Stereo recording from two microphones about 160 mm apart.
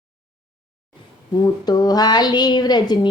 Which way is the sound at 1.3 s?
25° left (ahead or behind).